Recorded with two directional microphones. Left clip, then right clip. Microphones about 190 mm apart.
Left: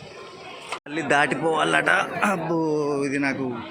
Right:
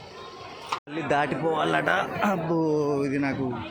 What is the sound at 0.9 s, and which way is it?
Speech, centre (ahead or behind).